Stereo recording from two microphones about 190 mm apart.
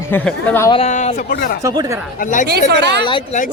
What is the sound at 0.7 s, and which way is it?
Speech, 35° left (ahead or behind).